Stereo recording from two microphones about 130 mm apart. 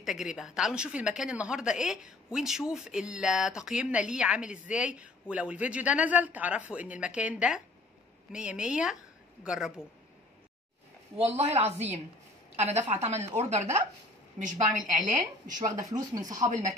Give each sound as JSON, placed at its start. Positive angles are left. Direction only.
{"t": 0.0, "sound": "speech", "side_deg": 0}
{"t": 11.3, "sound": "a woman's voice", "side_deg": -55}
{"t": 14.4, "sound": "a woman's voice", "side_deg": -75}
{"t": 15.6, "sound": "speech", "side_deg": -30}